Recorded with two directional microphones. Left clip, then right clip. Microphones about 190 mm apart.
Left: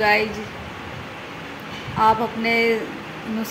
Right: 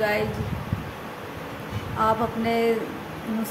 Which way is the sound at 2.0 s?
5° right (ahead or behind).